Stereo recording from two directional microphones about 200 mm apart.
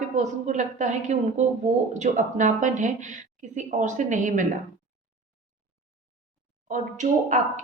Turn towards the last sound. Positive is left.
turn(degrees=-40)  # may be behind; listen again after turning